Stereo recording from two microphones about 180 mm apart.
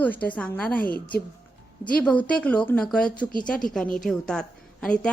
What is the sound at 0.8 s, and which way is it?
Speech, 55° left (ahead or behind).